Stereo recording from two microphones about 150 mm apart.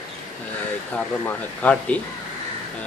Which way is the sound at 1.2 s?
10° left (ahead or behind).